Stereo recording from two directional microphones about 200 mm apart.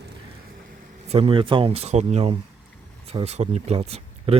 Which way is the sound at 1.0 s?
30° right (ahead or behind).